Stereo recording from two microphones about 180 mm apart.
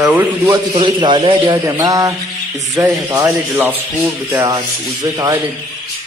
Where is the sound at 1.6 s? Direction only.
20° right (ahead or behind).